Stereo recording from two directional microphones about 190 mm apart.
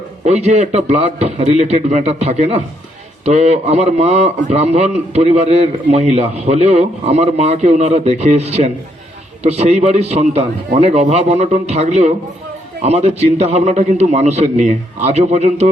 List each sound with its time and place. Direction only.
0.3 s a man's voice: 35° right (ahead or behind)